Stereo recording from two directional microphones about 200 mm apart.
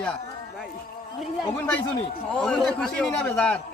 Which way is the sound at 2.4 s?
Centre (ahead or behind).